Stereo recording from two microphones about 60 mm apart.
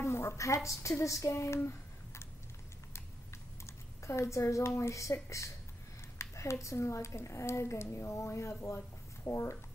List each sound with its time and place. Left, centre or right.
0.0 s speech: left
1.6 s a sound: left
3.6 s a woman's voice: left